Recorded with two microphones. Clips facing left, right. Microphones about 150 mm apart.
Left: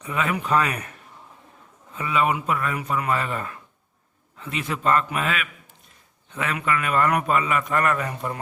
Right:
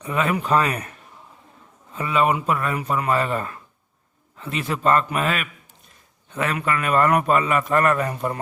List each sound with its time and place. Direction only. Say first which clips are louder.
0.0 s a man's voice: right 3 dB; 35° right (ahead or behind)
2.0 s a man's voice: right 2 dB; 35° right (ahead or behind)